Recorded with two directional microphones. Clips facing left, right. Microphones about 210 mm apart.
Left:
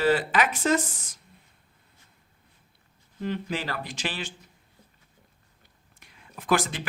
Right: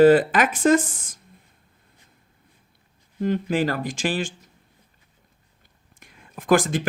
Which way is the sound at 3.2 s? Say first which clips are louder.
Right 8 dB; 50° right (ahead or behind).